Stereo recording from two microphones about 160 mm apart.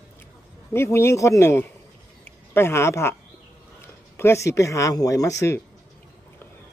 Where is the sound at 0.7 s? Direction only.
15° left (ahead or behind).